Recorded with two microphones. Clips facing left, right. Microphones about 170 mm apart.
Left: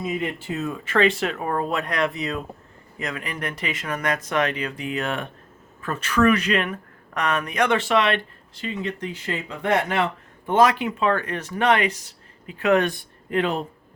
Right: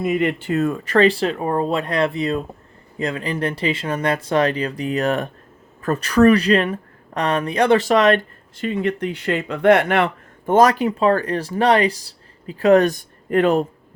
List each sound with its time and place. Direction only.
0.0 s speech: 70° right (ahead or behind)
0.4 s speech: 55° right (ahead or behind)
10.4 s speech: 40° right (ahead or behind)